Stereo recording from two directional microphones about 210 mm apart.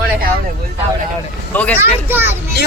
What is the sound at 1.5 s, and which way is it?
Speech, 5° left (ahead or behind).